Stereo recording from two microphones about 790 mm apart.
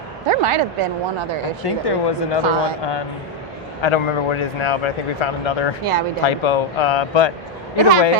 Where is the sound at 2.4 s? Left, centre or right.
Right.